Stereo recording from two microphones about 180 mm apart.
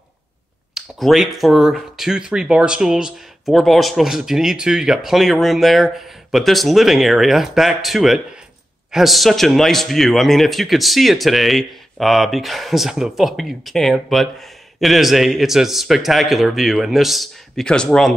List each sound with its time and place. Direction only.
0.7 s a man's voice: centre (ahead or behind)